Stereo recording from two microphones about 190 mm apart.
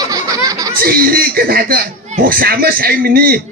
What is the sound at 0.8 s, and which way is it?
Speech, 50° right (ahead or behind).